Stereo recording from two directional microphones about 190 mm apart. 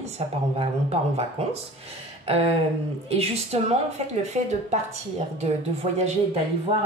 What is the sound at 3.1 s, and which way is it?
A woman's voice, 35° right (ahead or behind).